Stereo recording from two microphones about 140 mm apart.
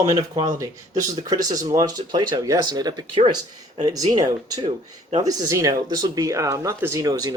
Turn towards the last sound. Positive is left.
turn(degrees=-25)  # may be behind; listen again after turning